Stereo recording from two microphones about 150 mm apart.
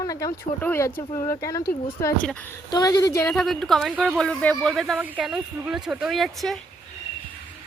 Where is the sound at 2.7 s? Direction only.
25° left (ahead or behind).